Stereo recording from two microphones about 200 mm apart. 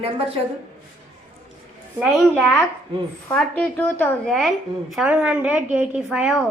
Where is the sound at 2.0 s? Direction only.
5° left (ahead or behind).